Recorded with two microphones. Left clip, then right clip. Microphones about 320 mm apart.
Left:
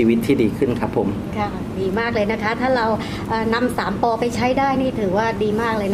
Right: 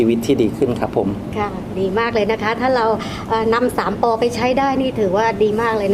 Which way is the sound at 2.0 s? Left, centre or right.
Right.